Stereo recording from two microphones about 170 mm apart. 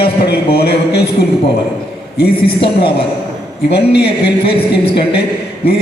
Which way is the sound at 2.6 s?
30° left (ahead or behind).